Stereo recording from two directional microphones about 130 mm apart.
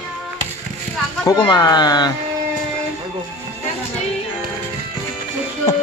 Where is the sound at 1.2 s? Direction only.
30° left (ahead or behind).